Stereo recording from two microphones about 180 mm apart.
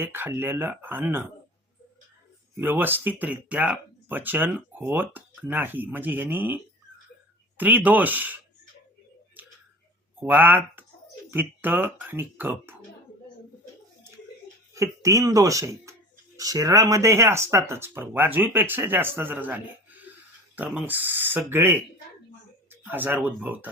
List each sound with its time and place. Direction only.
0.0 s speech: 10° right (ahead or behind)
2.6 s speech: 10° right (ahead or behind)
9.4 s tick-tock: 10° right (ahead or behind)
10.2 s speech: 10° right (ahead or behind)
14.7 s speech: 15° right (ahead or behind)